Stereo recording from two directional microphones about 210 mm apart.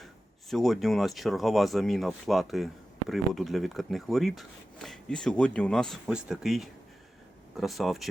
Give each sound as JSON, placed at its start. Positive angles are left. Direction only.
{"t": 0.5, "sound": "speech", "side_deg": 0}